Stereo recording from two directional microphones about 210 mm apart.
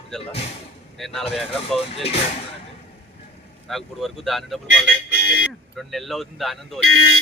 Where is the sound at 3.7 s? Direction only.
Centre (ahead or behind).